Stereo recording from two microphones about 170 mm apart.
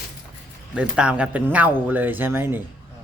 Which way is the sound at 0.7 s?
5° right (ahead or behind).